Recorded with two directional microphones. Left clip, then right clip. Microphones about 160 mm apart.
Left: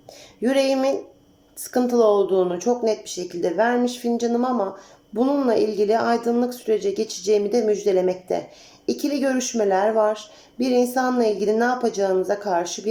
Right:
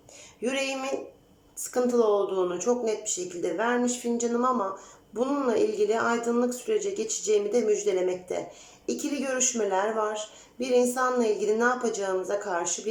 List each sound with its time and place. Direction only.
0.4 s speech: 30° left (ahead or behind)